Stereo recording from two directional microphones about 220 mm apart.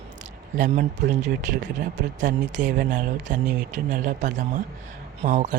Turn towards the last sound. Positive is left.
turn(degrees=-35)  # may be behind; listen again after turning